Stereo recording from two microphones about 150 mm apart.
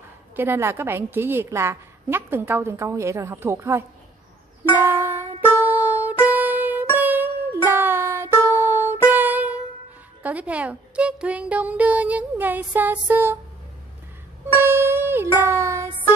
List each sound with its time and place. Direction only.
0.4 s a woman's voice: 15° right (ahead or behind)
4.7 s music: 15° right (ahead or behind)
10.2 s a woman's voice: 10° right (ahead or behind)
14.5 s music: 15° right (ahead or behind)